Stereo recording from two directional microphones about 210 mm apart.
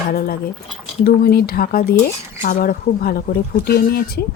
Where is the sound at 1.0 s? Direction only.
45° left (ahead or behind).